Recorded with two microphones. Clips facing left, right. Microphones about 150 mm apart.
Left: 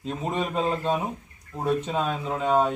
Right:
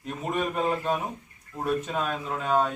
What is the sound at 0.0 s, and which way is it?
Speech, 25° left (ahead or behind).